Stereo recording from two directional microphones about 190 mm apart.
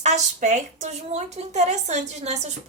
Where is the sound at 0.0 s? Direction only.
40° right (ahead or behind).